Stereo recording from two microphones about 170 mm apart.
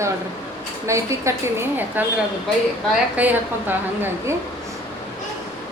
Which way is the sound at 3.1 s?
10° right (ahead or behind).